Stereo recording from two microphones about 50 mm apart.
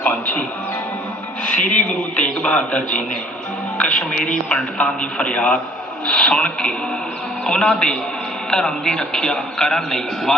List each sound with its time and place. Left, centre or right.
0.0 s music: left
1.5 s a man's voice: left